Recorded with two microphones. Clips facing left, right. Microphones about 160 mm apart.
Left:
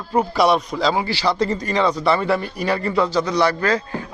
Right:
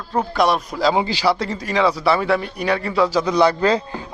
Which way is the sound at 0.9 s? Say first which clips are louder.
Right 2 dB; 20° right (ahead or behind).